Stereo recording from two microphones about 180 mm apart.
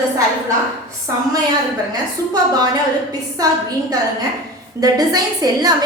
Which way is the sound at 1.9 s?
20° right (ahead or behind).